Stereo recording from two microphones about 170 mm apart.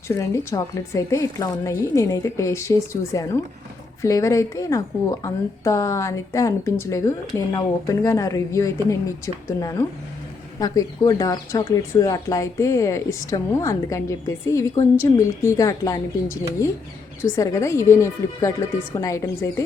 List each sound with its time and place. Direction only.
0.2 s a woman's voice: 20° left (ahead or behind)
17.2 s a woman's voice: 15° left (ahead or behind)